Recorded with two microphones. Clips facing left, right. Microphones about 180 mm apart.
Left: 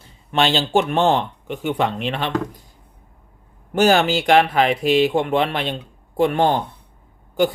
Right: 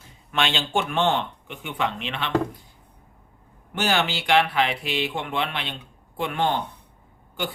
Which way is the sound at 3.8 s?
45° left (ahead or behind).